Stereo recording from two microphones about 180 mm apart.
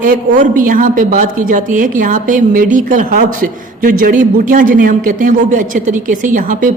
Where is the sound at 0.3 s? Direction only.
50° right (ahead or behind).